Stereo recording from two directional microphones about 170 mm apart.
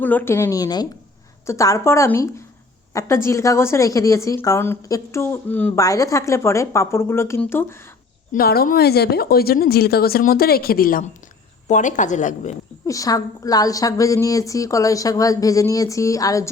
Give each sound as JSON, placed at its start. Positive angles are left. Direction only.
{"t": 0.0, "sound": "a woman's voice", "side_deg": 10}
{"t": 8.3, "sound": "a woman's voice", "side_deg": 65}
{"t": 12.8, "sound": "a woman's voice", "side_deg": 20}